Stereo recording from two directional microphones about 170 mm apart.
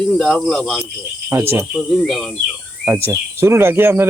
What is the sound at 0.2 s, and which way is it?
Cricket, 5° left (ahead or behind).